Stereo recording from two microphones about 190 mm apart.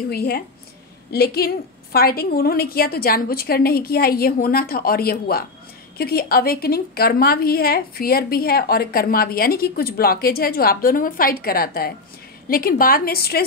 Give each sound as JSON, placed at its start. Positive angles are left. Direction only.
{"t": 0.1, "sound": "a woman's voice", "side_deg": 55}